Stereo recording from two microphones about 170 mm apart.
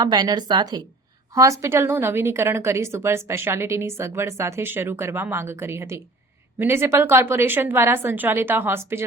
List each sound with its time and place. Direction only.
0.0 s a woman's voice: 25° right (ahead or behind)